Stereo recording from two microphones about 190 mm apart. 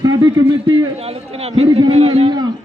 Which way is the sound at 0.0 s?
20° right (ahead or behind).